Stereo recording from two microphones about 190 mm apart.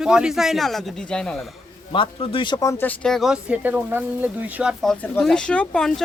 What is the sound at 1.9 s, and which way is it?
Speech, 30° left (ahead or behind).